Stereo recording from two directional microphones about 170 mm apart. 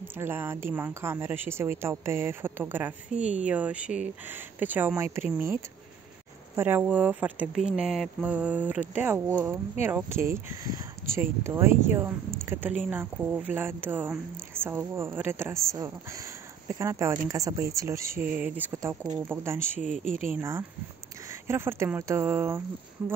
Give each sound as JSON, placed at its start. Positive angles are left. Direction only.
{"t": 0.2, "sound": "speech", "side_deg": -15}